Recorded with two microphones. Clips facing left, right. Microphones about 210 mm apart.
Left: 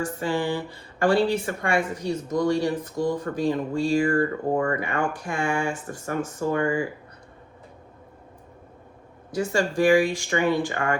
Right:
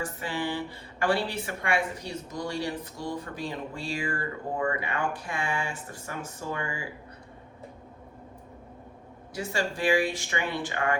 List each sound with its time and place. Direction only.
0.0 s speech: 45° left (ahead or behind)
9.3 s speech: 50° left (ahead or behind)